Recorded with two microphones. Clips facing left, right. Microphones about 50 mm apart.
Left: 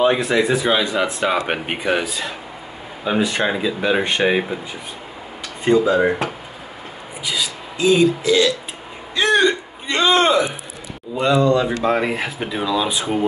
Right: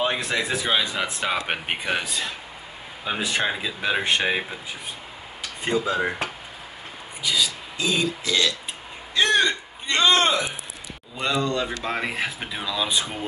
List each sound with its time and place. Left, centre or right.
0.0 s speech: centre
5.9 s speech: centre
7.2 s speech: centre
9.1 s a sound: centre
11.1 s speech: centre